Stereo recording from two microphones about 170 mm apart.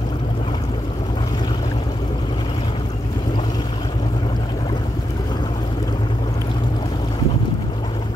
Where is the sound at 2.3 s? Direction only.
25° left (ahead or behind).